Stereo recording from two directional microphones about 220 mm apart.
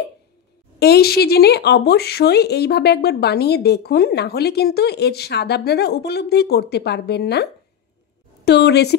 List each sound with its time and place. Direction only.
0.7 s speech: 45° left (ahead or behind)
8.5 s speech: 50° left (ahead or behind)